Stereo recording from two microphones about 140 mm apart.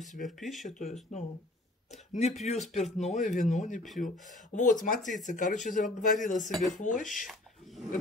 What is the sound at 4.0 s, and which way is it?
Speech, 70° left (ahead or behind).